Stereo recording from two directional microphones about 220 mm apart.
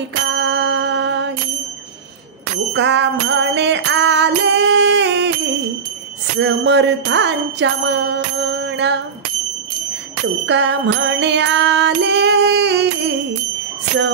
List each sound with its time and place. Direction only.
0.3 s a sound: 50° right (ahead or behind)
2.7 s music: 50° right (ahead or behind)
6.4 s music: 50° right (ahead or behind)
10.4 s music: 55° right (ahead or behind)